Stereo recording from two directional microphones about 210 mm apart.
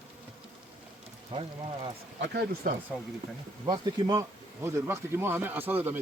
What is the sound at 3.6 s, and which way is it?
Speech, 20° right (ahead or behind).